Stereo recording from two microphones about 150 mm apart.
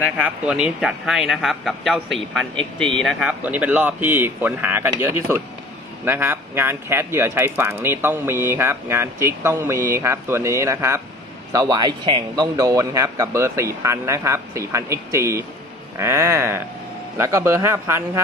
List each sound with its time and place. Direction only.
0.2 s speech: 5° right (ahead or behind)
3.3 s speech: 10° right (ahead or behind)